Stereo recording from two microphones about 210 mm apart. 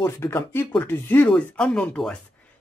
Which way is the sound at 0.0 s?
10° left (ahead or behind).